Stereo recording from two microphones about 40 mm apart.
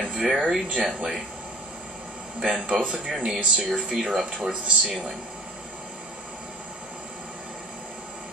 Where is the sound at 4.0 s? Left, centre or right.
Centre.